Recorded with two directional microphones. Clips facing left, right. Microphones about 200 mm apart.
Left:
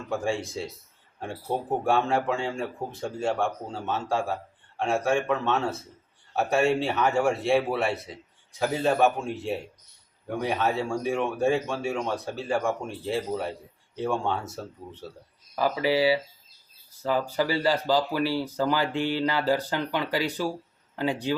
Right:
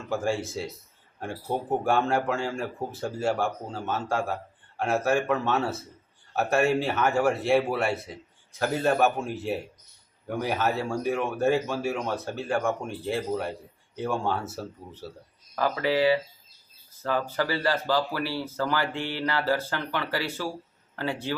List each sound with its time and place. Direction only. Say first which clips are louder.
0.1 s speech: right 1 dB; centre (ahead or behind)
15.5 s speech: left 1 dB; 10° left (ahead or behind)